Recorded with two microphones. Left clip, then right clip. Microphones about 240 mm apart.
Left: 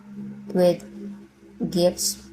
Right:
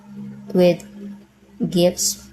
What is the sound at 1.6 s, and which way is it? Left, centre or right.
Speech, right.